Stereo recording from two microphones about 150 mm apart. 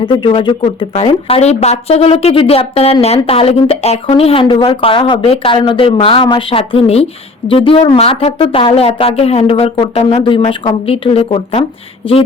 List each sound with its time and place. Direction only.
0.0 s a woman's voice: 30° left (ahead or behind)